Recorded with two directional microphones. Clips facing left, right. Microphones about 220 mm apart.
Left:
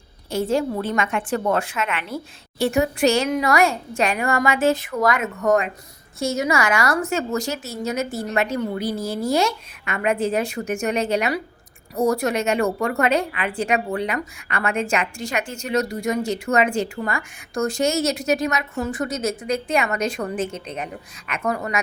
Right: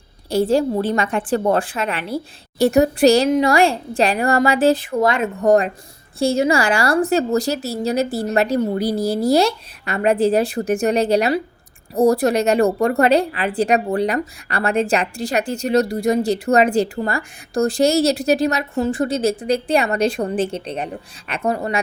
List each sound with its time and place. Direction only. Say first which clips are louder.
0.3 s a woman's voice: right 5 dB; 35° right (ahead or behind)